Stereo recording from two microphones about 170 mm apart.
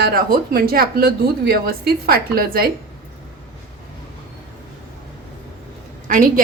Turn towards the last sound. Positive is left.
turn(degrees=-55)  # may be behind; listen again after turning